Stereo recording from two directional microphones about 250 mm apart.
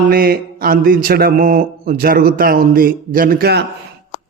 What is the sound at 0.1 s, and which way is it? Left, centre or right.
Speech, right.